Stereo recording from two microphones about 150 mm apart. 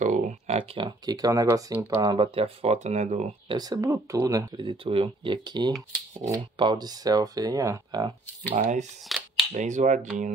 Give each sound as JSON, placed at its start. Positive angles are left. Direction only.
{"t": 0.0, "sound": "a sound", "side_deg": -55}
{"t": 0.6, "sound": "speech", "side_deg": -30}
{"t": 3.5, "sound": "speech", "side_deg": -25}
{"t": 4.8, "sound": "speech", "side_deg": -35}
{"t": 8.5, "sound": "speech", "side_deg": -50}
{"t": 9.1, "sound": "speech", "side_deg": 0}
{"t": 9.5, "sound": "speech", "side_deg": -55}